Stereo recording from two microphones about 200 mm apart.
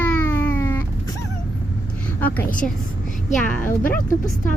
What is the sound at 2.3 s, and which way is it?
Speech, 40° left (ahead or behind).